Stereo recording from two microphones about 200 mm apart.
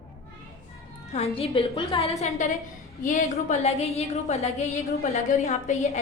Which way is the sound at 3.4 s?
35° left (ahead or behind).